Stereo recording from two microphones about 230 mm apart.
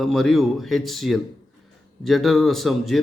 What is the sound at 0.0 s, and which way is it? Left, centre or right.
A man's voice, centre.